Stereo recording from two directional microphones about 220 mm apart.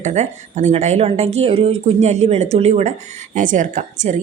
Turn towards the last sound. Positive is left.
turn(degrees=-35)  # may be behind; listen again after turning